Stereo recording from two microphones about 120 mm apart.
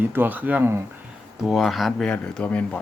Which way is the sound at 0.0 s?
15° right (ahead or behind).